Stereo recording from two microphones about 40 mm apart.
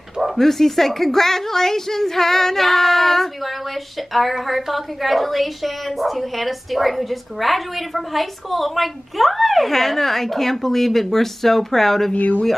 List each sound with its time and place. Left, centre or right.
0.4 s a woman's voice: centre
12.1 s speech: left